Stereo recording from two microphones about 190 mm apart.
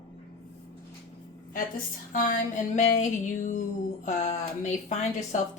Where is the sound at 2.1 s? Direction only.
45° left (ahead or behind).